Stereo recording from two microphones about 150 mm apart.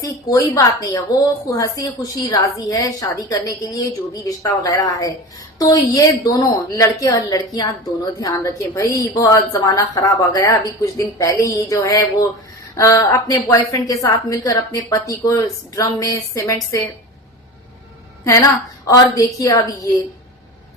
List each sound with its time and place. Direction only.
0.0 s a woman's voice: 25° left (ahead or behind)
18.3 s a woman's voice: 20° left (ahead or behind)